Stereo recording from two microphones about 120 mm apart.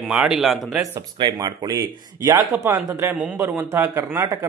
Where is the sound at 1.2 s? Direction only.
35° right (ahead or behind).